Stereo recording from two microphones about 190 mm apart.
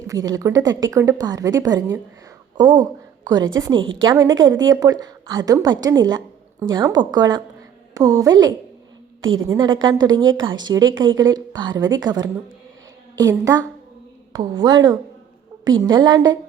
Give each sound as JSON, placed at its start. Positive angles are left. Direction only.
{"t": 0.1, "sound": "a woman's voice", "side_deg": -15}
{"t": 4.3, "sound": "a woman's voice", "side_deg": -85}
{"t": 4.6, "sound": "a woman's voice", "side_deg": -20}
{"t": 9.2, "sound": "speech", "side_deg": -90}
{"t": 9.9, "sound": "a woman's voice", "side_deg": -20}
{"t": 10.8, "sound": "speech", "side_deg": -90}
{"t": 11.2, "sound": "a woman's voice", "side_deg": -20}